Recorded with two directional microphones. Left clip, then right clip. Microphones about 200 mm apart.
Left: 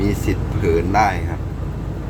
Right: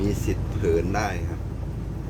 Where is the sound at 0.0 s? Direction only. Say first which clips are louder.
Left 6 dB; centre (ahead or behind).